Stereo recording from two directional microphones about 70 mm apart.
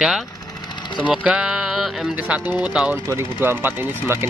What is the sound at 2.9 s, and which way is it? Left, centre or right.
Speech, right.